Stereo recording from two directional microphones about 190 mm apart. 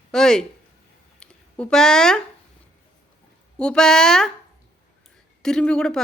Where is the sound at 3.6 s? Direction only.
5° left (ahead or behind).